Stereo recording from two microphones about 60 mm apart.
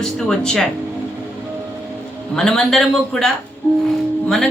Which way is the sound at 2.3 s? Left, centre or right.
Centre.